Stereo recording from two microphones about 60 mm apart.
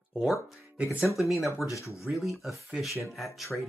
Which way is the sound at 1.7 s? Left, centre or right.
Left.